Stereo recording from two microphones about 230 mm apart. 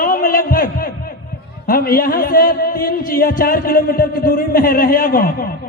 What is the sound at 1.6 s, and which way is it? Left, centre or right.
Speech, left.